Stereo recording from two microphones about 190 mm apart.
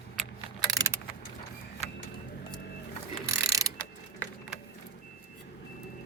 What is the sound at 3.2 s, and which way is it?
Pulleys, 15° right (ahead or behind).